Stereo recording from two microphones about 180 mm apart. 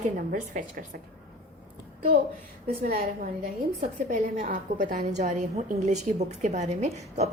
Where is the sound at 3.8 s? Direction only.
45° right (ahead or behind).